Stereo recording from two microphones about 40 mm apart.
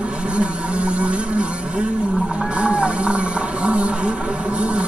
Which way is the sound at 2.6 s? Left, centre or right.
Right.